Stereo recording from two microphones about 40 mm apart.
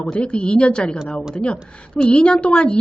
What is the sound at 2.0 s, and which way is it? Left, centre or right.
Speech, left.